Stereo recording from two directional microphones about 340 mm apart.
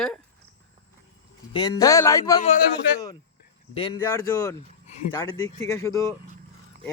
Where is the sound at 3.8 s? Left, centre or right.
Centre.